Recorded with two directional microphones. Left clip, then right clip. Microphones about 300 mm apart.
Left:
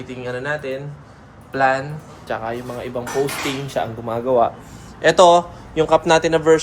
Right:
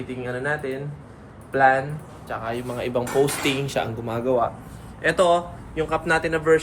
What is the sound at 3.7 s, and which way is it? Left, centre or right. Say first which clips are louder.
Speech: left 3 dB; centre.